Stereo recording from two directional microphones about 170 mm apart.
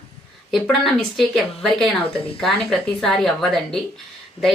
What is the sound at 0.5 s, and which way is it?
A woman's voice, centre (ahead or behind).